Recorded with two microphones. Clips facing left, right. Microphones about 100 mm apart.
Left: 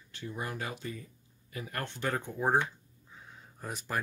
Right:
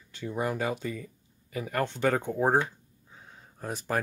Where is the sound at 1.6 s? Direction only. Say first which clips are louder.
Right 8 dB; 90° right.